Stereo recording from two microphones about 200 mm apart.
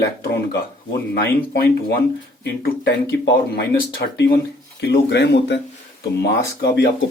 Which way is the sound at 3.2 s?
60° left (ahead or behind).